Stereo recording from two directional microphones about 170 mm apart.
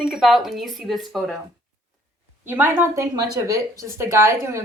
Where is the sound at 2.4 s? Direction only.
10° right (ahead or behind).